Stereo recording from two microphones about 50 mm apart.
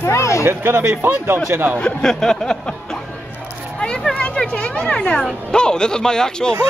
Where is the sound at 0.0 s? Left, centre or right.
Left.